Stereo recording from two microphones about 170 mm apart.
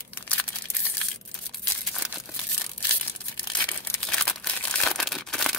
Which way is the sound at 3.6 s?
5° left (ahead or behind).